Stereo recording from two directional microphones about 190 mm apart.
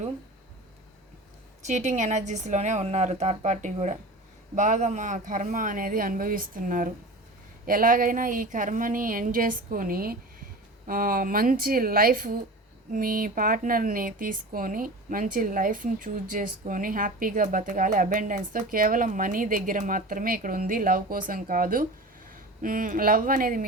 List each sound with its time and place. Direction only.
1.6 s a woman's voice: 40° right (ahead or behind)